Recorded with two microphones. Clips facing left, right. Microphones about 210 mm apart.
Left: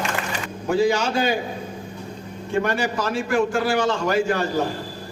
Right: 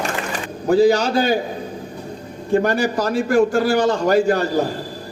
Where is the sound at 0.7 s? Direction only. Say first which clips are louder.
Right 6 dB; 35° right (ahead or behind).